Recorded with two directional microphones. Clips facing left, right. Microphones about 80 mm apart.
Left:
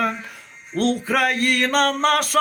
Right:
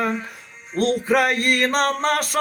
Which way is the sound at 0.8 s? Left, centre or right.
Right.